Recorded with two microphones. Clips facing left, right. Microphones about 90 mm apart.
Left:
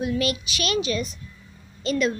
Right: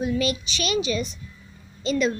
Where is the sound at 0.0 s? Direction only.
5° left (ahead or behind).